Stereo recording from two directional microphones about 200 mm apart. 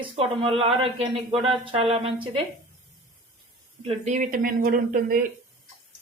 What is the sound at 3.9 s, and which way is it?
Speech, 35° right (ahead or behind).